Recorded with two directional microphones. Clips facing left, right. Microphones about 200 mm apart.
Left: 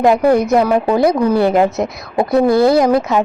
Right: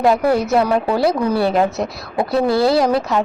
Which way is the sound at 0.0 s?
15° left (ahead or behind).